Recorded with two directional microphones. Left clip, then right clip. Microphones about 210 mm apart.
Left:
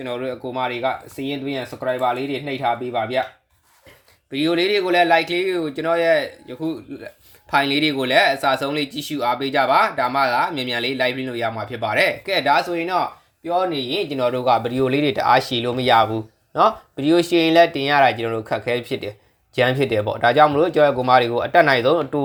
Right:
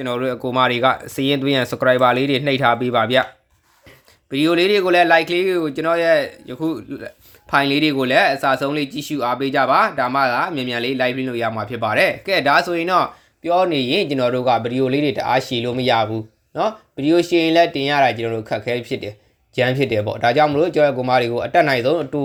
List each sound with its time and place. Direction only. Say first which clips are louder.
0.0 s speech: right 5 dB; 30° right (ahead or behind)
4.3 s speech: right 3 dB; 25° right (ahead or behind); by 22.2 s 5° right (ahead or behind)